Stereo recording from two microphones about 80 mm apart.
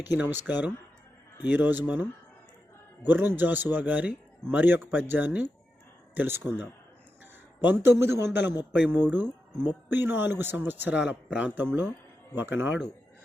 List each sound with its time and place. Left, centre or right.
0.0 s a man's voice: right
3.0 s a man's voice: right
8.9 s a man's voice: right